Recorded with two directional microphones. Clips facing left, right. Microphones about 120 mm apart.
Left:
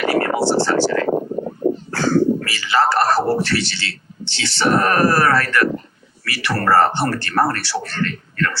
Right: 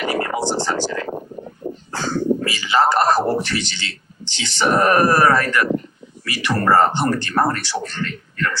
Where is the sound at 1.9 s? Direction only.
15° right (ahead or behind).